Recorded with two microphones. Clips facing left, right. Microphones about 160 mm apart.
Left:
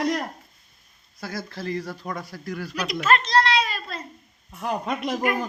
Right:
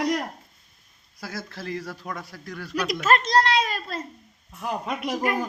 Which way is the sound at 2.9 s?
45° right (ahead or behind).